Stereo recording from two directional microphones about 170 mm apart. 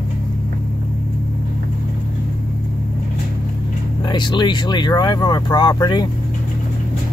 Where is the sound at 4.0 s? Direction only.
25° left (ahead or behind).